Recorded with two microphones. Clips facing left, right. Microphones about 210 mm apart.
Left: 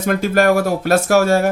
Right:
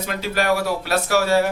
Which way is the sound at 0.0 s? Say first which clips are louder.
Left 8 dB; 50° left (ahead or behind).